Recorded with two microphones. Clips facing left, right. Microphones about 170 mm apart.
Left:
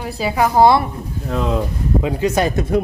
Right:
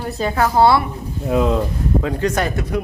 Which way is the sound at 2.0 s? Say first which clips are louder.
Left 3 dB; 15° left (ahead or behind).